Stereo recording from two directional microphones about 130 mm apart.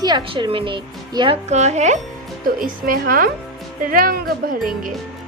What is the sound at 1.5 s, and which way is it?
Speech, 60° right (ahead or behind).